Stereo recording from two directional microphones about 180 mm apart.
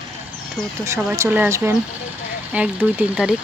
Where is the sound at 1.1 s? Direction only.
15° right (ahead or behind).